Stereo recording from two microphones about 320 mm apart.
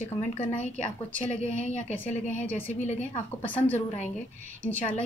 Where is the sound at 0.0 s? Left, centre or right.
Left.